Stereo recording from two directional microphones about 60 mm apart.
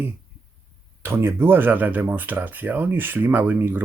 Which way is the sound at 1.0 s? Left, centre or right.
Right.